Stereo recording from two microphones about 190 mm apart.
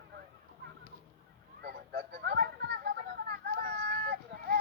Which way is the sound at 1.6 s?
55° right (ahead or behind).